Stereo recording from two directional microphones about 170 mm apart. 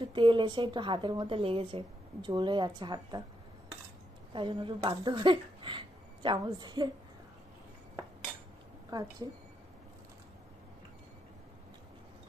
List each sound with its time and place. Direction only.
0.0 s a woman's voice: 30° right (ahead or behind)
4.3 s speech: 30° right (ahead or behind)
8.9 s a woman's voice: 20° right (ahead or behind)